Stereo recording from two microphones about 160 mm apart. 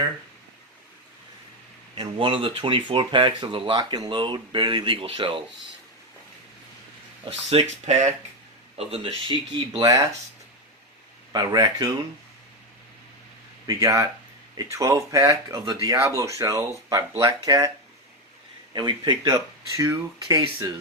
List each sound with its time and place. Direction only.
2.0 s speech: 35° right (ahead or behind)
7.3 s speech: 40° right (ahead or behind)
9.8 s speech: 20° right (ahead or behind)
11.3 s speech: 25° right (ahead or behind)
13.7 s speech: 20° right (ahead or behind)
18.7 s speech: 25° right (ahead or behind)